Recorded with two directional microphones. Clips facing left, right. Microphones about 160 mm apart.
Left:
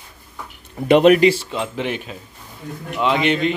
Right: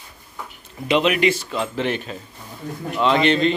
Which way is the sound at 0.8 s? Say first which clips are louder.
Left 7 dB; 50° left (ahead or behind).